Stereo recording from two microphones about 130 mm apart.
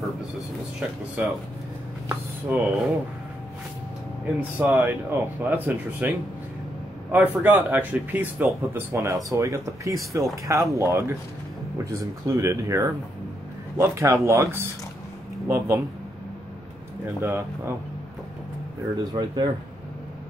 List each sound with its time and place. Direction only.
0.7 s speech: 10° right (ahead or behind)
4.4 s speech: 10° right (ahead or behind)
8.5 s speech: 25° right (ahead or behind)
17.0 s speech: 20° right (ahead or behind)
19.1 s speech: 35° right (ahead or behind)